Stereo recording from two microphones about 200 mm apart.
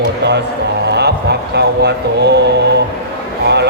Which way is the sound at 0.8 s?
55° right (ahead or behind).